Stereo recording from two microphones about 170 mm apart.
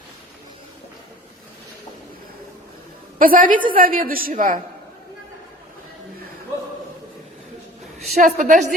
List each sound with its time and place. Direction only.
3.2 s a woman's voice: 55° right (ahead or behind)
8.1 s a woman's voice: 45° right (ahead or behind)